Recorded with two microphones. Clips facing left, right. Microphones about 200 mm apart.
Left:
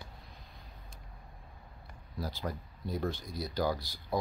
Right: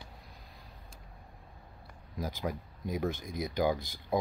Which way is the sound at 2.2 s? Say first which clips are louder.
Right 2 dB; 15° right (ahead or behind).